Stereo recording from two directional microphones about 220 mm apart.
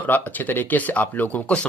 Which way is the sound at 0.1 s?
10° left (ahead or behind).